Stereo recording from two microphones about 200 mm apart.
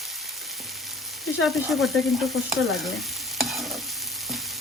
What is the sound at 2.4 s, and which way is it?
Stir, centre (ahead or behind).